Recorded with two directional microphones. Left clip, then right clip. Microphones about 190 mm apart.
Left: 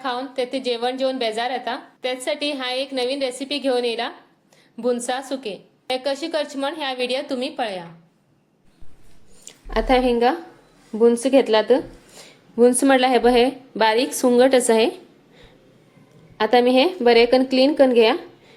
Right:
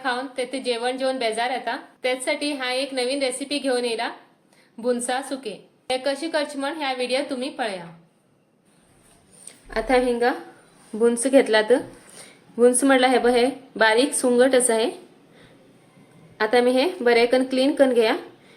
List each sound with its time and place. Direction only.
0.0 s a woman's voice: 30° left (ahead or behind)
9.6 s a woman's voice: 35° left (ahead or behind)
10.9 s a woman's voice: 15° left (ahead or behind); by 14.9 s 30° left (ahead or behind)
16.4 s a woman's voice: 30° left (ahead or behind)